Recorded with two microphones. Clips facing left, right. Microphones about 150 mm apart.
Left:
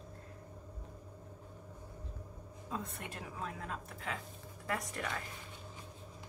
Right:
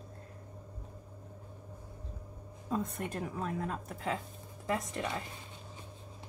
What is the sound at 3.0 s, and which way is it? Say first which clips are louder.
A woman's voice: right 7 dB; 40° right (ahead or behind).